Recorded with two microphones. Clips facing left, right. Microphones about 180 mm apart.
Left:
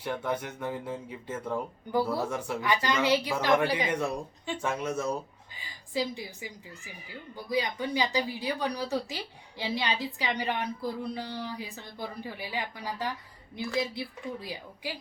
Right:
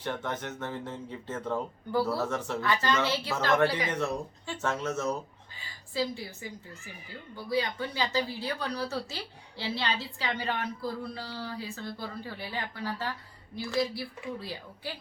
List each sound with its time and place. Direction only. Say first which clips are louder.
0.0 s speech: left 2 dB; 10° left (ahead or behind)